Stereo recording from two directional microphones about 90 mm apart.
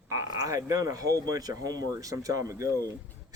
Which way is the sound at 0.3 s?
35° right (ahead or behind).